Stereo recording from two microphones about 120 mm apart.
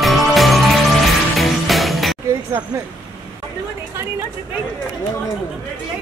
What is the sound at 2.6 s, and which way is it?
Speech, 25° right (ahead or behind).